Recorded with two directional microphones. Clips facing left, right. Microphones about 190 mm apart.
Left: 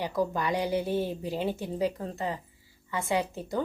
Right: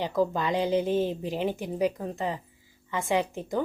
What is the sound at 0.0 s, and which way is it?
A woman's voice, 20° right (ahead or behind).